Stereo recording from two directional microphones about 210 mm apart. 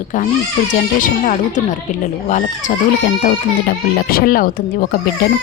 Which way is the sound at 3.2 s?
50° left (ahead or behind).